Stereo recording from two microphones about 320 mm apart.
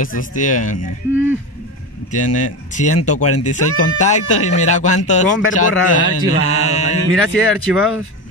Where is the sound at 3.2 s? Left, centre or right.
Left.